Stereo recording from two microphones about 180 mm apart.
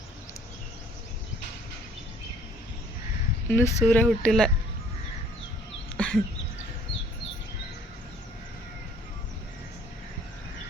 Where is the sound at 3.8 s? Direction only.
5° left (ahead or behind).